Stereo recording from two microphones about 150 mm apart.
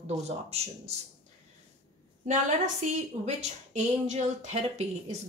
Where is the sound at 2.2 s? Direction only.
55° right (ahead or behind).